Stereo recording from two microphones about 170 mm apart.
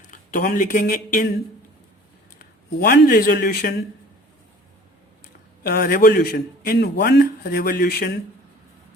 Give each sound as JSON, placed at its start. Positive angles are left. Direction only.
{"t": 0.1, "sound": "speech", "side_deg": 50}
{"t": 2.4, "sound": "speech", "side_deg": 60}
{"t": 5.6, "sound": "a man's voice", "side_deg": 60}